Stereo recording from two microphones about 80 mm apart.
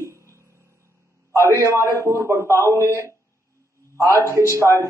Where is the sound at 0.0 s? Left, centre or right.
Right.